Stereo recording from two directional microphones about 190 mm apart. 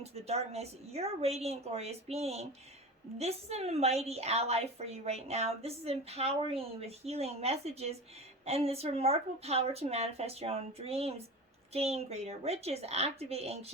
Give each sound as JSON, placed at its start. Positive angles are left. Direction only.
{"t": 0.0, "sound": "a woman's voice", "side_deg": -35}